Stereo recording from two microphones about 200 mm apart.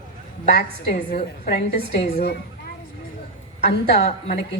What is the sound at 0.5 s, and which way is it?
A woman's voice, 50° left (ahead or behind).